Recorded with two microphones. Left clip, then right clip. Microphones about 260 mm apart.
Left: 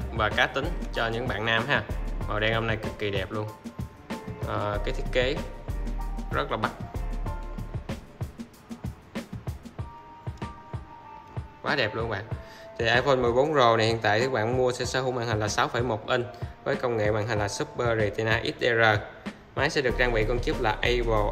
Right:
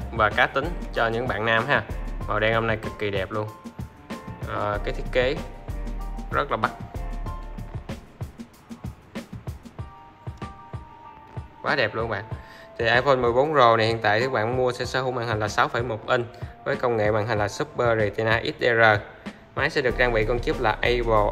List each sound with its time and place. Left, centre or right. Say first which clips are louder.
0.0 s speech: right 4 dB; centre
4.5 s speech: right 3 dB; centre
5.0 s music: right 3 dB; centre
6.3 s speech: right 4 dB; centre
6.7 s music: right 2 dB; centre
11.6 s speech: right 3 dB; centre